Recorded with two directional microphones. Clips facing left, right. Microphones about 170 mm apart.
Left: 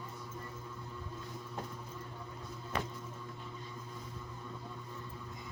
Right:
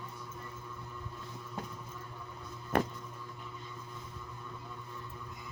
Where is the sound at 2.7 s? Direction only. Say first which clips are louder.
Right 8 dB; 55° right (ahead or behind).